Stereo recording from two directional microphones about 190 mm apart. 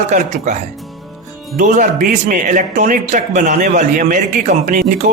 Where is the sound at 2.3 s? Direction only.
45° right (ahead or behind).